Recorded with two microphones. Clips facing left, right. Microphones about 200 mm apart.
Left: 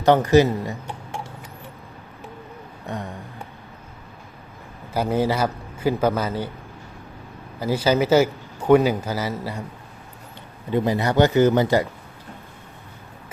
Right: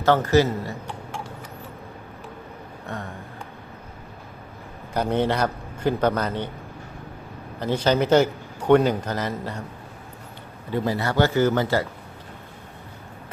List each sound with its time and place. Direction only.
0.0 s a man's voice: 15° left (ahead or behind)
2.8 s a sound: 15° left (ahead or behind)
4.9 s a man's voice: 5° left (ahead or behind)
7.6 s a man's voice: 5° left (ahead or behind)
10.7 s a man's voice: 20° left (ahead or behind)